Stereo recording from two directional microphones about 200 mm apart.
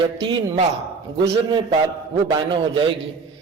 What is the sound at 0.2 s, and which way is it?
Speech, 25° right (ahead or behind).